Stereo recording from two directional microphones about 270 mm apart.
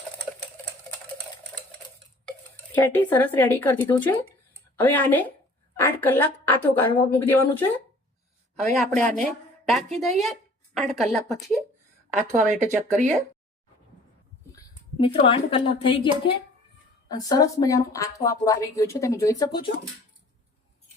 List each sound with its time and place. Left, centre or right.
2.7 s a man's voice: centre
12.3 s speech: right
15.0 s speech: centre